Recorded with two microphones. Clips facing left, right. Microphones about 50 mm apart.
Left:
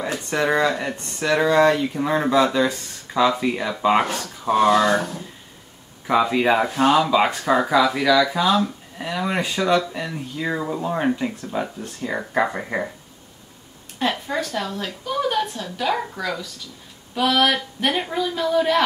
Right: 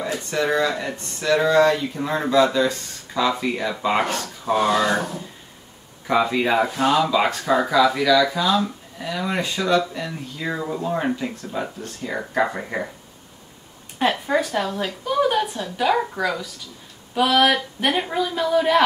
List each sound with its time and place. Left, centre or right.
0.0 s speech: centre
6.0 s speech: centre
13.9 s speech: centre